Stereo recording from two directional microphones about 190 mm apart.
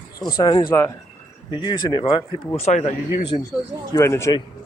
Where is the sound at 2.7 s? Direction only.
35° left (ahead or behind).